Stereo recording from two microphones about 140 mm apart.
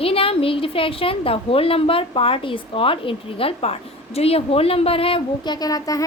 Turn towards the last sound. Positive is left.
turn(degrees=25)  # may be behind; listen again after turning